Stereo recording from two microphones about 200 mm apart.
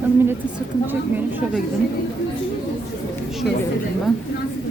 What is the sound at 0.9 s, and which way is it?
Speech, 10° right (ahead or behind).